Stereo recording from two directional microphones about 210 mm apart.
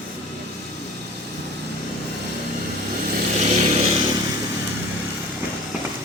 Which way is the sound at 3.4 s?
30° right (ahead or behind).